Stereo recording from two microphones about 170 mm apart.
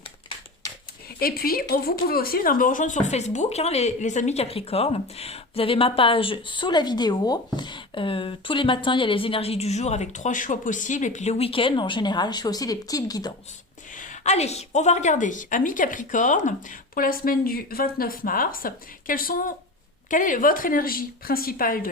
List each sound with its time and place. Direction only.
1.2 s speech: 60° left (ahead or behind); by 13.3 s 20° left (ahead or behind)
13.9 s a woman's voice: 50° left (ahead or behind)